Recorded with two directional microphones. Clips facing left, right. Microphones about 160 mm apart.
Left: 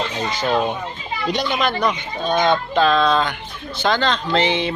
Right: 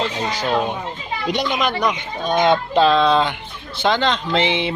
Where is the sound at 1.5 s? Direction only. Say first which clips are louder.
Even; 15° right (ahead or behind).